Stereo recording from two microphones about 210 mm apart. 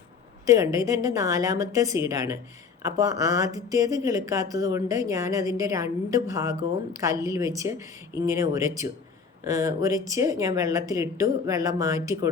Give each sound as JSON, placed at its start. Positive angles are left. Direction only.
{"t": 0.4, "sound": "speech", "side_deg": -15}